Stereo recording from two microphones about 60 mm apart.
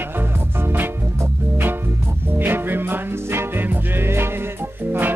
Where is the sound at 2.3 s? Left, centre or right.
Right.